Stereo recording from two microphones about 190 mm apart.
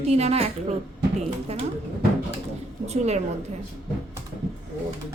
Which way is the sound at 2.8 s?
35° right (ahead or behind).